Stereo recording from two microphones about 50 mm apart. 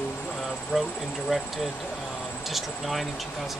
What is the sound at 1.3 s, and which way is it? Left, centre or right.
Speech, centre.